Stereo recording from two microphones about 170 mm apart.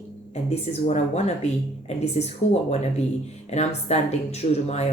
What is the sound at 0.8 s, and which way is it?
Speech, 40° left (ahead or behind).